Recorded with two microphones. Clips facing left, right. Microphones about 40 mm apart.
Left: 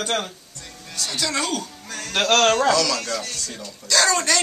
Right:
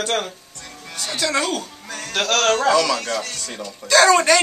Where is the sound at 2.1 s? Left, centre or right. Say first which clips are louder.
Left 1 dB; centre.